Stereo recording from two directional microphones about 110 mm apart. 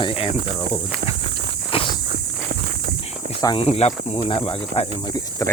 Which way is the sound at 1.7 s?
55° left (ahead or behind).